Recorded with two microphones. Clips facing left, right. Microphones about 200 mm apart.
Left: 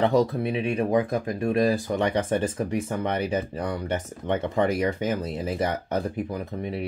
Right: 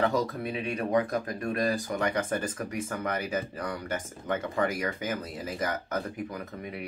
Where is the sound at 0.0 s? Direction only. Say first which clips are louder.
Left 6 dB; 25° left (ahead or behind).